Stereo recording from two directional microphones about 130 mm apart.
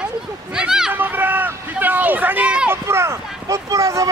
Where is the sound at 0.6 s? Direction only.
5° right (ahead or behind).